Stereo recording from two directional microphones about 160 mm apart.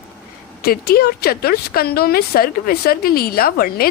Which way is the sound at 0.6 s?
75° left (ahead or behind).